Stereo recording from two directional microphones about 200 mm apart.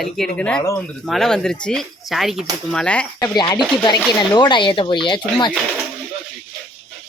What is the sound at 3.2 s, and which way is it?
Speech, 20° left (ahead or behind).